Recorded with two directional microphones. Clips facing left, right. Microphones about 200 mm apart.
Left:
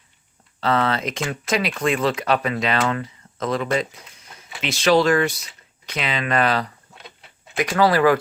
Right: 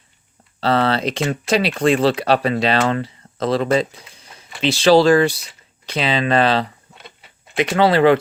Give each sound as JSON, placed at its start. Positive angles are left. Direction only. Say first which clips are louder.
{"t": 0.6, "sound": "speech", "louder": "right 4 dB", "side_deg": -30}
{"t": 6.9, "sound": "a sound", "louder": "right 1 dB", "side_deg": 0}
{"t": 7.5, "sound": "speech", "louder": "right 3 dB", "side_deg": -25}